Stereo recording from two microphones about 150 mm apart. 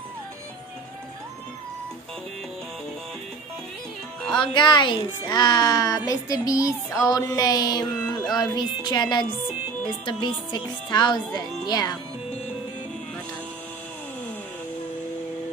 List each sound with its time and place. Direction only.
4.3 s speech: 30° left (ahead or behind)